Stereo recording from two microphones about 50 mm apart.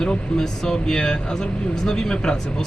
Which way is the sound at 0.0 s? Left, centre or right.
Centre.